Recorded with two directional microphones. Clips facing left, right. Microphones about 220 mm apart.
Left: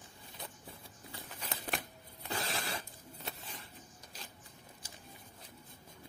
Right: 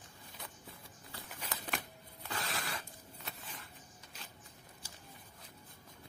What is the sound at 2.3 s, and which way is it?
Zipper, 30° left (ahead or behind).